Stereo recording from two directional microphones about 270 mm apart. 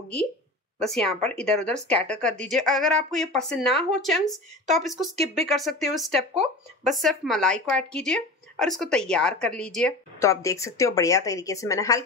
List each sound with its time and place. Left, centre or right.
0.7 s speech: centre
5.2 s speech: right
5.5 s speech: centre